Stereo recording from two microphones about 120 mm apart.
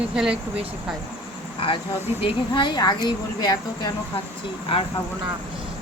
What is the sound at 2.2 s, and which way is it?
A woman's voice, 40° left (ahead or behind).